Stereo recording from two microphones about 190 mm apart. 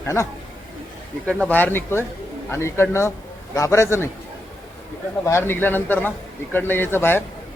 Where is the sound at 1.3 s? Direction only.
5° left (ahead or behind).